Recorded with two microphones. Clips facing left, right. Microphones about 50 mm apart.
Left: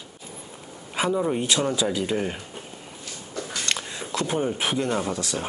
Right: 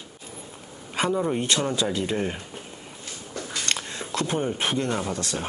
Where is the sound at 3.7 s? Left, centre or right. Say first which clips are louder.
Even; centre.